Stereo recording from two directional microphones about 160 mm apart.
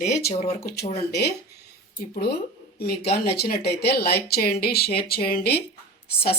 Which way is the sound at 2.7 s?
80° left.